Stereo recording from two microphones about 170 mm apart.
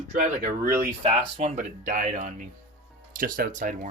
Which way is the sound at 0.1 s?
55° right (ahead or behind).